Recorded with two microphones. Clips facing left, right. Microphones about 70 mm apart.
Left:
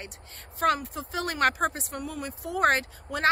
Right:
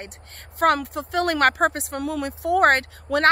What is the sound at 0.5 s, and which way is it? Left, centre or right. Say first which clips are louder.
Speech: right 6 dB; right.